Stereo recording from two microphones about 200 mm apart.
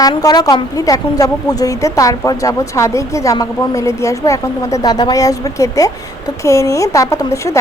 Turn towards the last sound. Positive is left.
turn(degrees=15)  # may be behind; listen again after turning